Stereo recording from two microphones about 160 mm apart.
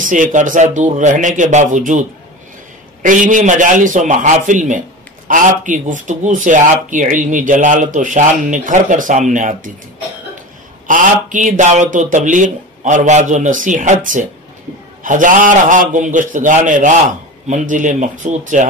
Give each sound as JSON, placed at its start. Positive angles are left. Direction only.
{"t": 0.1, "sound": "speech", "side_deg": -50}
{"t": 3.0, "sound": "speech", "side_deg": -55}
{"t": 10.9, "sound": "speech", "side_deg": -55}